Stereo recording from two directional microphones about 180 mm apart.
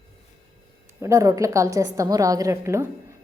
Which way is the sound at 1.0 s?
15° right (ahead or behind).